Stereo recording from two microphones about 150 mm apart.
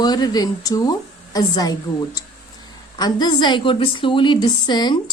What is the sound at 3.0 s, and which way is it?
A woman's voice, 25° left (ahead or behind).